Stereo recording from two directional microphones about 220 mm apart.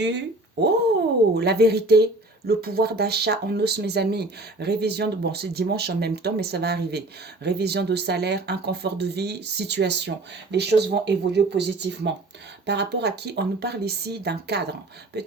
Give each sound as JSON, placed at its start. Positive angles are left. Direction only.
{"t": 1.3, "sound": "speech", "side_deg": -45}